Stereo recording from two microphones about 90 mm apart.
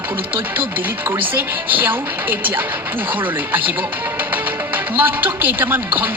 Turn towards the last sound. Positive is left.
turn(degrees=-20)  # may be behind; listen again after turning